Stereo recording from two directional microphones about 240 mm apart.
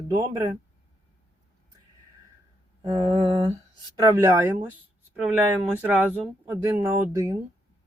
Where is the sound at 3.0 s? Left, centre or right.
Right.